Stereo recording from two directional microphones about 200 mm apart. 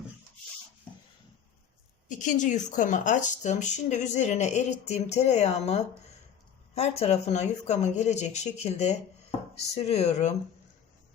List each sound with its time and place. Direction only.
2.0 s speech: 40° left (ahead or behind)